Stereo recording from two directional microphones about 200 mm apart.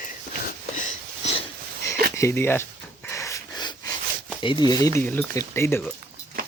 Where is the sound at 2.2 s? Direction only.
10° left (ahead or behind).